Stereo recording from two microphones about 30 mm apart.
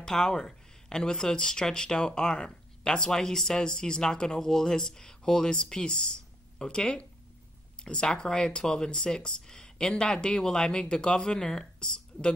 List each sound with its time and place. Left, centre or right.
0.0 s speech: left
6.1 s a sound: left
7.8 s speech: left